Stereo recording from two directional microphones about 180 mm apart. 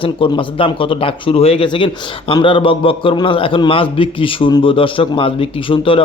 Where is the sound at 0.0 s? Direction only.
30° left (ahead or behind).